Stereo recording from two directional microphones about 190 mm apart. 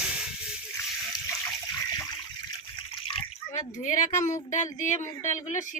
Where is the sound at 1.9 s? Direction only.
20° left (ahead or behind); by 4.0 s 45° left (ahead or behind).